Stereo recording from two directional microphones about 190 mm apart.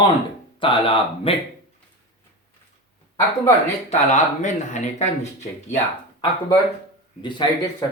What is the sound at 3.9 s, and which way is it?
Speech, 40° left (ahead or behind).